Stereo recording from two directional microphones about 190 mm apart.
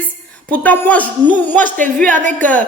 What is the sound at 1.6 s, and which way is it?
Speech, 45° right (ahead or behind).